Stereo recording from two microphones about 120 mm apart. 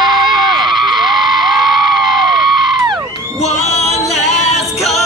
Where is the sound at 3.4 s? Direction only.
65° left (ahead or behind).